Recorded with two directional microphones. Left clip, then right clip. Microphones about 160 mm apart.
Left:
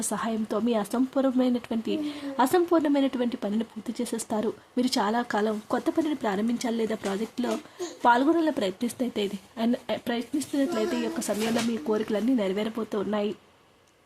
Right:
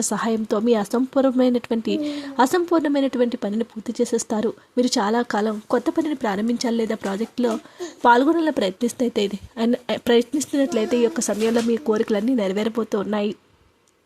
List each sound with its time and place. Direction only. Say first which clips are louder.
0.1 s a woman's voice: right 5 dB; 35° right (ahead or behind)